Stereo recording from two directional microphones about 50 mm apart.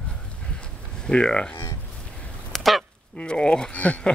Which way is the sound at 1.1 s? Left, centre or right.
Centre.